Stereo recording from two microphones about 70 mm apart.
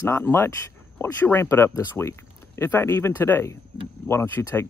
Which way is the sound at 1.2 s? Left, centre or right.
Left.